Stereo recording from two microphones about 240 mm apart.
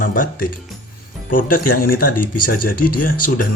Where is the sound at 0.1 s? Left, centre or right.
Left.